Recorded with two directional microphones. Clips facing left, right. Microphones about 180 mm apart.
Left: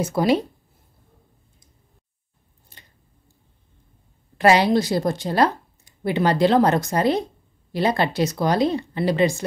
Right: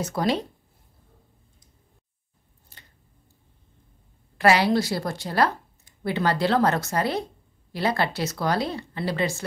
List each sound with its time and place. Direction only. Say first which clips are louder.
0.0 s speech: left 5 dB; 10° left (ahead or behind)
4.4 s speech: left 3 dB; 20° left (ahead or behind)